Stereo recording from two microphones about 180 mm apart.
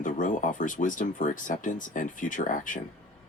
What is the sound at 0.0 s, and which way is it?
Speech, 45° left (ahead or behind).